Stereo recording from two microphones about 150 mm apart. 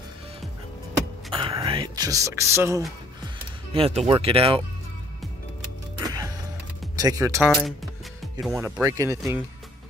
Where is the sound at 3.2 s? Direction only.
40° right (ahead or behind).